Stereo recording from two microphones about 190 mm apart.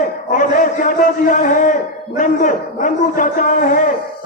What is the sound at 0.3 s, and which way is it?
A man's voice, 45° left (ahead or behind).